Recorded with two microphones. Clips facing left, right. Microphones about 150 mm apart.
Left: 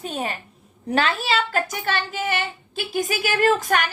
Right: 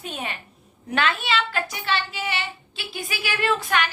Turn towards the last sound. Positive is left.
turn(degrees=45)  # may be behind; listen again after turning